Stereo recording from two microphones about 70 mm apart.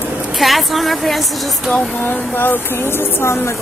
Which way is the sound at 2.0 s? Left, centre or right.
Left.